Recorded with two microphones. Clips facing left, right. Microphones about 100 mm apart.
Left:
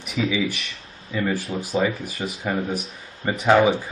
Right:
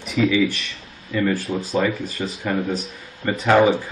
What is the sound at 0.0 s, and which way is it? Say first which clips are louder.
Speech: right 5 dB; 10° left (ahead or behind).